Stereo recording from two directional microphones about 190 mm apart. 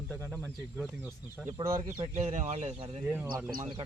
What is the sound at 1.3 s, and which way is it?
Speech, 15° right (ahead or behind).